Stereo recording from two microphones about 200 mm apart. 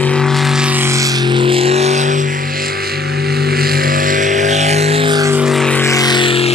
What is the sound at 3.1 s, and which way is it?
Vehicle, 50° right (ahead or behind).